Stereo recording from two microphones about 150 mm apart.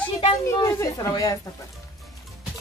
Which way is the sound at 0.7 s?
25° left (ahead or behind).